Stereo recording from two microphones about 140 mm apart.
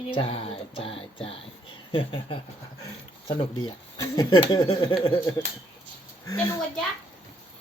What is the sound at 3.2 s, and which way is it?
Speech, 30° left (ahead or behind).